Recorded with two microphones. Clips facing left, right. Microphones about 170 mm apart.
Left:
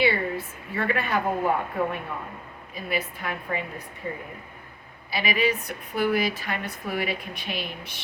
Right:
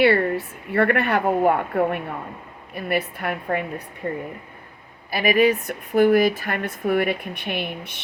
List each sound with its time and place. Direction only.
0.0 s a woman's voice: 65° right (ahead or behind)
5.1 s speech: 50° right (ahead or behind)